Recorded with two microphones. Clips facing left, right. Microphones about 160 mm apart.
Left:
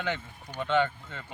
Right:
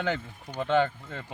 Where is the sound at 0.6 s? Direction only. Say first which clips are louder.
Right 2 dB; 35° right (ahead or behind).